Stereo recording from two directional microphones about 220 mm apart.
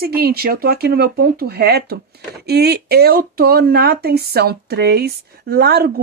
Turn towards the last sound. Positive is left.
turn(degrees=-45)  # may be behind; listen again after turning